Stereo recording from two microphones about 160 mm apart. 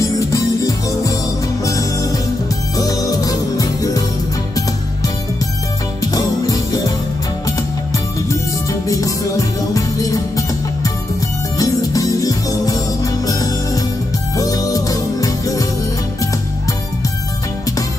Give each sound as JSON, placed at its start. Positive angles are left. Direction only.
{"t": 0.0, "sound": "music", "side_deg": 20}
{"t": 6.1, "sound": "music", "side_deg": 25}
{"t": 8.8, "sound": "music", "side_deg": 20}